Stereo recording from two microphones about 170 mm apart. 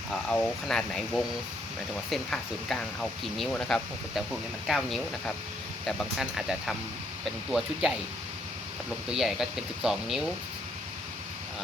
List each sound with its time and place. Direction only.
0.1 s speech: 10° left (ahead or behind)
9.0 s speech: 5° right (ahead or behind)